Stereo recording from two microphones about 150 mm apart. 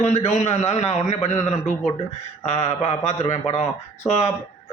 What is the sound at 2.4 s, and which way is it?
A man's voice, 45° left (ahead or behind).